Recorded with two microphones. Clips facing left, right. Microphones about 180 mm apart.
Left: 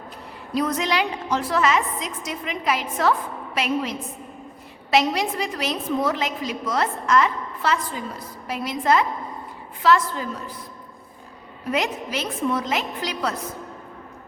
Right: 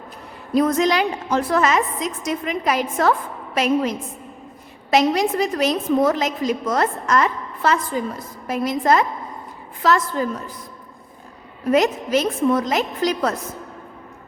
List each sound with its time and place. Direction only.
0.5 s a woman's voice: 50° right (ahead or behind)
11.7 s a woman's voice: 45° right (ahead or behind)